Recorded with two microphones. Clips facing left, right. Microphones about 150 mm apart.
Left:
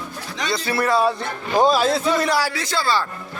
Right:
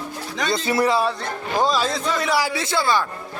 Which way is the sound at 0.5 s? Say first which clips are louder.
Right 3 dB; 20° right (ahead or behind).